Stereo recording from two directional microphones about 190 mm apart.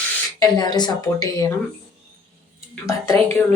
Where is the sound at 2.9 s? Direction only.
15° left (ahead or behind).